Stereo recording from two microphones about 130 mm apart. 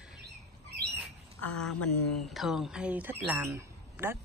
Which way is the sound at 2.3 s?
Centre (ahead or behind).